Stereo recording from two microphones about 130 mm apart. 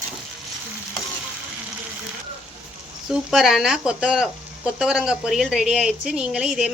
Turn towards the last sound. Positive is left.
turn(degrees=-5)  # may be behind; listen again after turning